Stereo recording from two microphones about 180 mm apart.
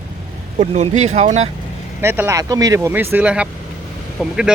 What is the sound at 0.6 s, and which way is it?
Speech, 40° right (ahead or behind).